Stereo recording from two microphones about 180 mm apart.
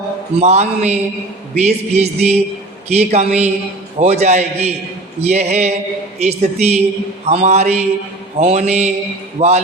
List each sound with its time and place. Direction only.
0.3 s a man's voice: 35° right (ahead or behind)